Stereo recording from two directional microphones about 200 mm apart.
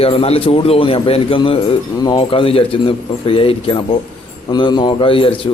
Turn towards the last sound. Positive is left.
turn(degrees=25)  # may be behind; listen again after turning